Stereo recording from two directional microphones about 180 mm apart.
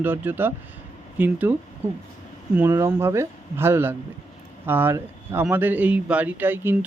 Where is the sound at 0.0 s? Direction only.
10° right (ahead or behind).